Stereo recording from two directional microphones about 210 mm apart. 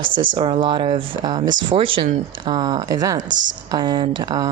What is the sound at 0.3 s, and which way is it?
A woman's voice, 25° right (ahead or behind).